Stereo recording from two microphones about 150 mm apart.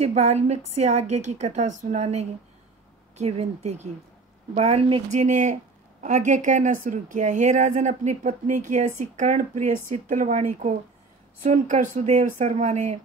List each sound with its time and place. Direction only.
0.0 s speech: 45° right (ahead or behind)
3.2 s speech: 45° right (ahead or behind)
5.1 s speech: 55° right (ahead or behind)